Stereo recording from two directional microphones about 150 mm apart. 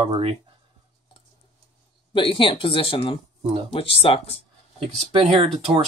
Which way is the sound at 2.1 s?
35° left (ahead or behind).